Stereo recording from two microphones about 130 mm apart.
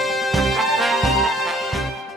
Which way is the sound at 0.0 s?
Centre (ahead or behind).